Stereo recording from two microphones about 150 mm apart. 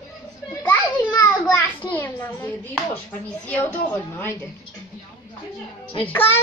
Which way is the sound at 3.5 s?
15° left (ahead or behind).